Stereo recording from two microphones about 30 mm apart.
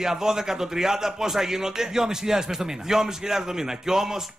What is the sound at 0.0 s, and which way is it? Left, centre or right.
A man's voice, centre.